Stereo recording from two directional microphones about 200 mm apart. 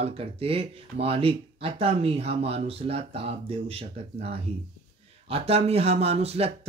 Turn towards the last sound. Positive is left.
turn(degrees=-30)  # may be behind; listen again after turning